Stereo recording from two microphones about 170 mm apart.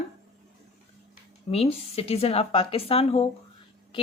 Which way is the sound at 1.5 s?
35° left (ahead or behind).